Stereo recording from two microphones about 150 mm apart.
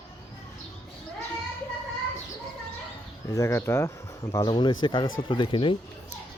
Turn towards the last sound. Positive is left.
turn(degrees=35)  # may be behind; listen again after turning